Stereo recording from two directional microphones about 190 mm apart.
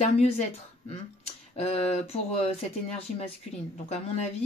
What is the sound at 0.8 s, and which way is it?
Speech, 35° left (ahead or behind).